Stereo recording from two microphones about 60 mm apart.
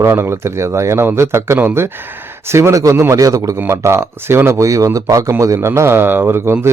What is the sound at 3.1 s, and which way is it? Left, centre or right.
Speech, right.